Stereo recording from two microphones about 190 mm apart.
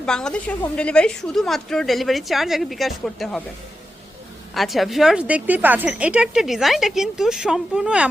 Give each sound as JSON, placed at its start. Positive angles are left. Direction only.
{"t": 0.0, "sound": "speech", "side_deg": 5}
{"t": 4.5, "sound": "speech", "side_deg": 0}